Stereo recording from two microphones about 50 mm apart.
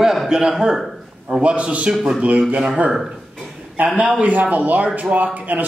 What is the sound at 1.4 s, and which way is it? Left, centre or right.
Speech, right.